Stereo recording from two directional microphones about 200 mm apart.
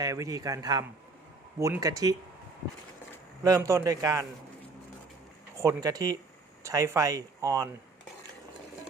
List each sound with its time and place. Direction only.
0.0 s speech: 15° right (ahead or behind)
3.4 s speech: 15° right (ahead or behind)
5.5 s speech: 15° right (ahead or behind)